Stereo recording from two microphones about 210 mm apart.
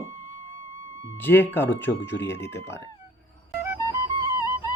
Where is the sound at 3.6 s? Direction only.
15° right (ahead or behind).